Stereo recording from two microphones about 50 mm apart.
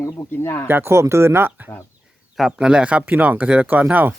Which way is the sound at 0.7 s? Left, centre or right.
Right.